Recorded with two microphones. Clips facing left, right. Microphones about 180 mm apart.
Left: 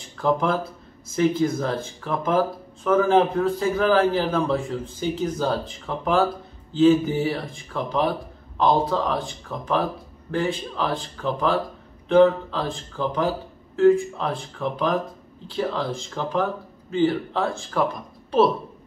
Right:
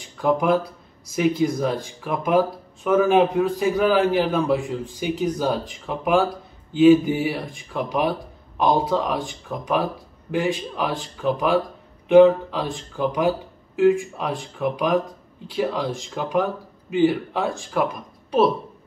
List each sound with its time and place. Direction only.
0.2 s speech: 15° right (ahead or behind)